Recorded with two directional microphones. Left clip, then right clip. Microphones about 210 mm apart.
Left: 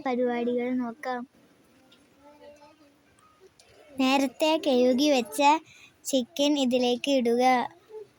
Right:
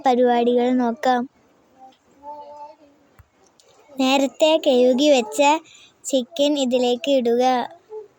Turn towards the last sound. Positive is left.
turn(degrees=10)  # may be behind; listen again after turning